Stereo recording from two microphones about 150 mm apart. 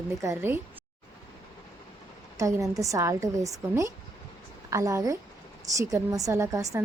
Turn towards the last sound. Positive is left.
turn(degrees=-20)  # may be behind; listen again after turning